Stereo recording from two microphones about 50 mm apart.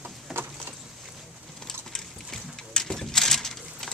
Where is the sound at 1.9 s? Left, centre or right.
Centre.